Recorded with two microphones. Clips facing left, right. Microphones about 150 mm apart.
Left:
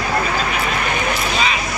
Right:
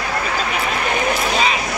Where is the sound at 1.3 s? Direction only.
35° right (ahead or behind).